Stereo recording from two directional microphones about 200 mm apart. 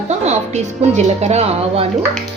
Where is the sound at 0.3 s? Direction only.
35° right (ahead or behind).